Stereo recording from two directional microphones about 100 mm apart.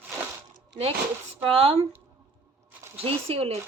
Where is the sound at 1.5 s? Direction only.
75° right (ahead or behind).